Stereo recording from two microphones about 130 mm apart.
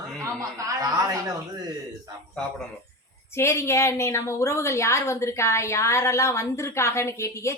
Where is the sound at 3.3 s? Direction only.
20° left (ahead or behind).